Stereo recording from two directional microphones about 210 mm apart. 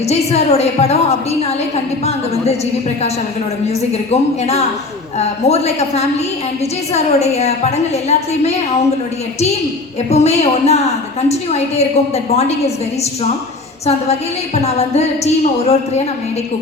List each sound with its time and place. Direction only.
0.0 s a woman's voice: 30° left (ahead or behind)
3.7 s a woman's voice: 30° left (ahead or behind)
10.1 s a woman's voice: 30° left (ahead or behind)
13.8 s a woman's voice: 30° left (ahead or behind)